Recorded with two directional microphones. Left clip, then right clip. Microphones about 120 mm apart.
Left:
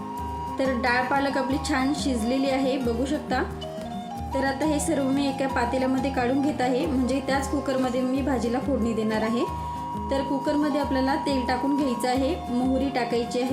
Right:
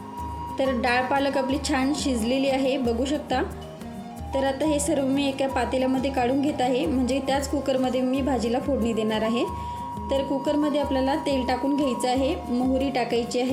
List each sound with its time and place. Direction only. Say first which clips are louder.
0.8 s a woman's voice: even; 25° right (ahead or behind)
10.1 s a woman's voice: right 2 dB; 20° right (ahead or behind)